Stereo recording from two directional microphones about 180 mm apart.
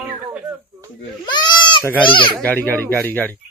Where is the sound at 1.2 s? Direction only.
25° left (ahead or behind).